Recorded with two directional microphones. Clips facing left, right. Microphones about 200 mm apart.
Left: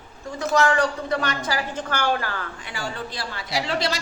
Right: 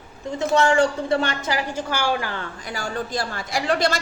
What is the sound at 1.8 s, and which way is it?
Speech, 10° right (ahead or behind).